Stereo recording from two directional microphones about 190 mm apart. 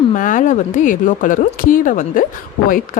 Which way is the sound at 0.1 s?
45° left (ahead or behind).